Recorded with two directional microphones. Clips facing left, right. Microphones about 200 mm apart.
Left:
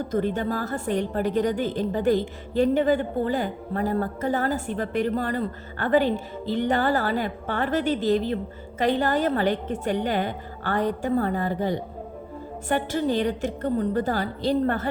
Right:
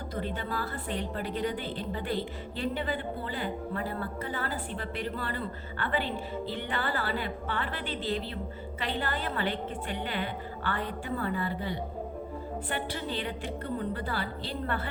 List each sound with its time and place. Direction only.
0.1 s a woman's voice: 45° left (ahead or behind)